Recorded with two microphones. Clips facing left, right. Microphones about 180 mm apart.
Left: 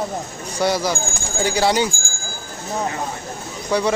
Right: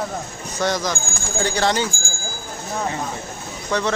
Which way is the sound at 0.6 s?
10° left (ahead or behind).